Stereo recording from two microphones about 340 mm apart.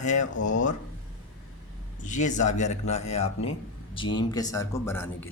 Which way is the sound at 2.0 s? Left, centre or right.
Left.